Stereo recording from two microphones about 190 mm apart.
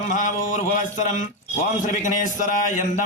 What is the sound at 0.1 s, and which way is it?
A man's voice, 40° left (ahead or behind).